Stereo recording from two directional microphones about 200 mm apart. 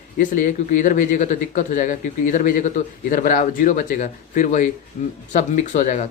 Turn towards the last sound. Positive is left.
turn(degrees=35)  # may be behind; listen again after turning